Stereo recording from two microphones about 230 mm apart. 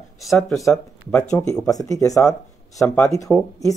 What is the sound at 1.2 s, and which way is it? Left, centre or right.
Speech, centre.